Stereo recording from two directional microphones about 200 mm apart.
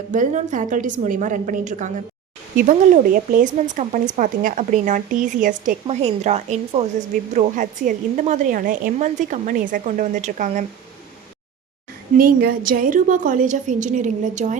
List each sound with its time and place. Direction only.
0.1 s a woman's voice: 40° right (ahead or behind)
12.1 s a woman's voice: 45° right (ahead or behind)